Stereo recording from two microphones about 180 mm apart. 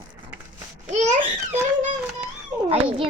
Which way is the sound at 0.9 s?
40° right (ahead or behind).